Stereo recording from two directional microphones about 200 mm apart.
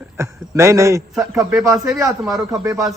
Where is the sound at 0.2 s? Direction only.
15° right (ahead or behind).